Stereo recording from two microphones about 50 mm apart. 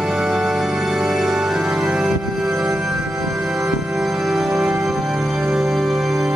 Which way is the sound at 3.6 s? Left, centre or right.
Centre.